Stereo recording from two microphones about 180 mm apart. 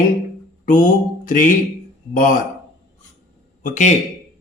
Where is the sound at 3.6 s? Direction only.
45° left (ahead or behind).